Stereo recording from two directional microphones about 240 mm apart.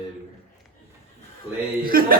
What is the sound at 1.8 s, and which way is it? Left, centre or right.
Speech, right.